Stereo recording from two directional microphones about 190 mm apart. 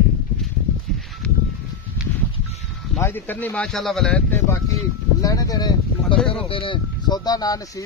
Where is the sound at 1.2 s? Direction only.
5° left (ahead or behind).